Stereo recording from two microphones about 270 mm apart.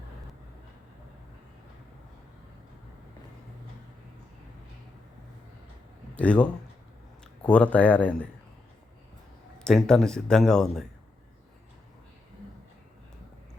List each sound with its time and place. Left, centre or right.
6.1 s speech: centre
9.6 s speech: centre